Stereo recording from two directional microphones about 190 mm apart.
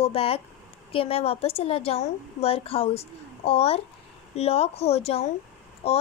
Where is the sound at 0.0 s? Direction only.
30° left (ahead or behind).